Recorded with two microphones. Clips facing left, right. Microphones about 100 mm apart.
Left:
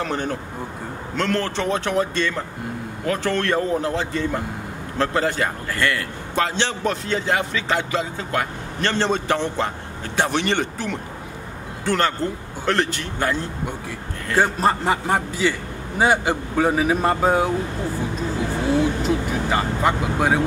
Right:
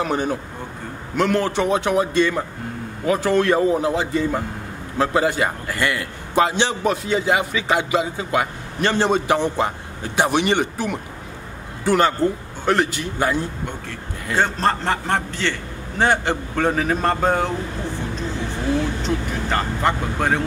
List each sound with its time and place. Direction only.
0.0 s a man's voice: 10° right (ahead or behind)
14.3 s speech: 10° left (ahead or behind)
19.0 s speech: 5° left (ahead or behind)